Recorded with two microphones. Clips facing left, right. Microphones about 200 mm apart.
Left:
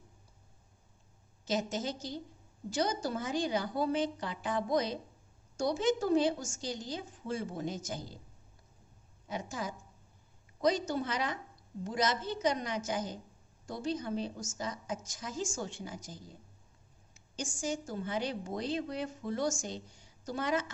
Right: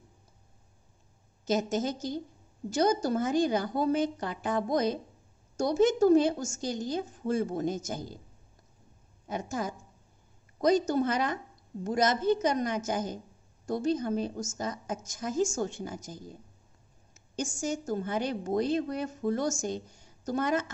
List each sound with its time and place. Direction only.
1.4 s a woman's voice: 45° right (ahead or behind)
9.3 s a woman's voice: 50° right (ahead or behind)
17.6 s a woman's voice: 45° right (ahead or behind)